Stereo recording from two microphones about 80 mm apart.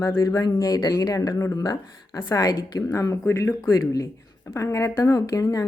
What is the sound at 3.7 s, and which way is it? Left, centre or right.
Speech, left.